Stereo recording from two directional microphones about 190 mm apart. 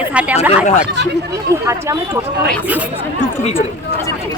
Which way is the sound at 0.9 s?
60° right (ahead or behind).